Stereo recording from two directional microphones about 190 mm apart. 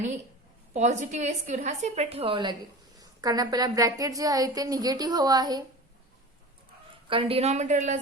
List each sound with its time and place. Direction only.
0.7 s a woman's voice: 40° right (ahead or behind); by 5.6 s 20° right (ahead or behind)
7.1 s a woman's voice: 30° right (ahead or behind)